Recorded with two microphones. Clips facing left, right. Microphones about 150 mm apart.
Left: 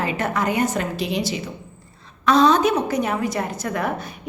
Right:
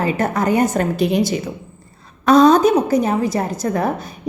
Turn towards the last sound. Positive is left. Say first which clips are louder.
# right 5 dB
turn(degrees=-35)  # may be behind; listen again after turning